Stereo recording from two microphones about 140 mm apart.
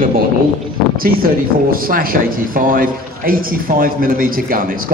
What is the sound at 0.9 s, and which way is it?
A man's voice, 90° right.